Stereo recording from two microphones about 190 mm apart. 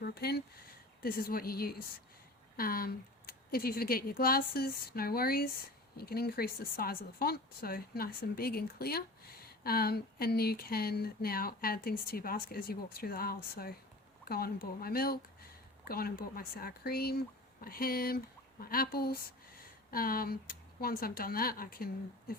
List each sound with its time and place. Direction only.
0.0 s speech: 55° left (ahead or behind)